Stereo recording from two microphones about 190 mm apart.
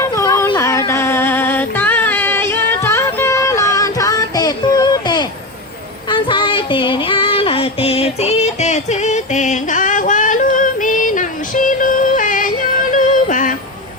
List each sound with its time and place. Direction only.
0.0 s a sound: 15° left (ahead or behind)
6.1 s female singing: 25° left (ahead or behind); by 12.5 s 45° left (ahead or behind)
12.9 s yodeling: 40° left (ahead or behind)